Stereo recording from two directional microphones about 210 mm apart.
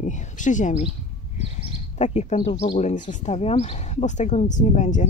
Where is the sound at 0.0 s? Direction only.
35° left (ahead or behind).